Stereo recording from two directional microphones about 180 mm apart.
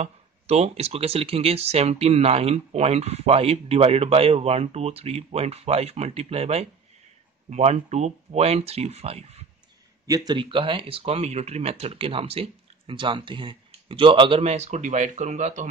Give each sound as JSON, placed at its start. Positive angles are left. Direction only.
{"t": 0.0, "sound": "speech", "side_deg": -35}
{"t": 10.0, "sound": "speech", "side_deg": -20}